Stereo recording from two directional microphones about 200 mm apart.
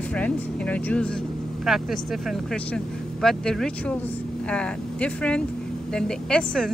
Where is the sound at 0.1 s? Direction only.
5° left (ahead or behind).